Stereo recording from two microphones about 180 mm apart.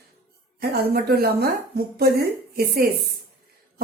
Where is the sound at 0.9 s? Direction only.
60° right (ahead or behind).